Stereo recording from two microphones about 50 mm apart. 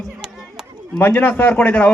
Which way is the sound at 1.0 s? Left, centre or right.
Left.